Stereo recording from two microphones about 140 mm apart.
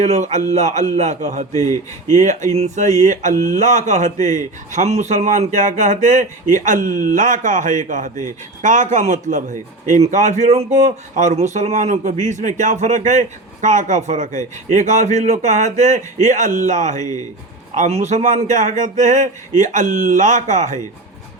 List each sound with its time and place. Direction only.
0.0 s speech: 55° right (ahead or behind)